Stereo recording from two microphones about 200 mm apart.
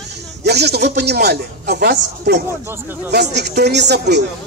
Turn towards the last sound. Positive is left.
turn(degrees=-55)  # may be behind; listen again after turning